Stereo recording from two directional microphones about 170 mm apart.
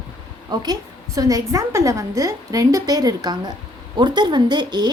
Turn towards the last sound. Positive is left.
turn(degrees=-25)  # may be behind; listen again after turning